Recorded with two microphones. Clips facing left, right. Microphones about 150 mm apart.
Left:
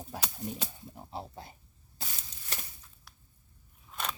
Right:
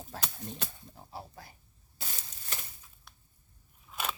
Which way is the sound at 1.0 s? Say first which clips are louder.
Left 4 dB; 20° left (ahead or behind).